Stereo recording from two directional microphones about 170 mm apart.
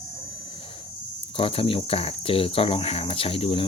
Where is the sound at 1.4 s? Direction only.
30° left (ahead or behind).